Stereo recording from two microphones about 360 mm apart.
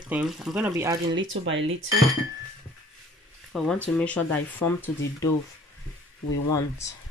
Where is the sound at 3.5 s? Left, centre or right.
Centre.